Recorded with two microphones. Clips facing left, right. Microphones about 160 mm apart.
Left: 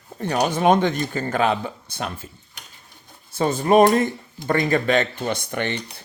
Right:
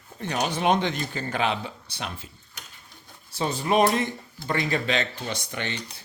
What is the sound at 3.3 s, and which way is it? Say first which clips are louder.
Speech: left 7 dB; 50° left (ahead or behind).